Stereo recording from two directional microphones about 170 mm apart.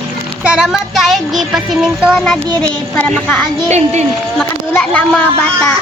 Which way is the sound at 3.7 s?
40° right (ahead or behind).